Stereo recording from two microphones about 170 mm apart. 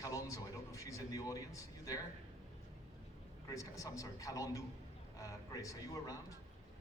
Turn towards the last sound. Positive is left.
turn(degrees=20)  # may be behind; listen again after turning